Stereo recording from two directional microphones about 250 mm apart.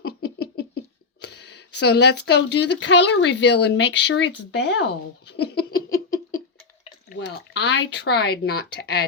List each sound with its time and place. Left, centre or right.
0.0 s a sound: left
1.2 s speech: left
5.2 s laughter: left
7.1 s speech: left